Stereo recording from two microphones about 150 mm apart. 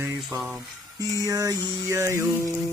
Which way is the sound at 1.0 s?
25° right (ahead or behind).